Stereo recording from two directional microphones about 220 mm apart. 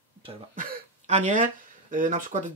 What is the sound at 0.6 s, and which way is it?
Speech, 35° right (ahead or behind).